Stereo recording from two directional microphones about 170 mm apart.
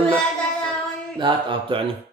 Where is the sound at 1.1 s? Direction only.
25° right (ahead or behind).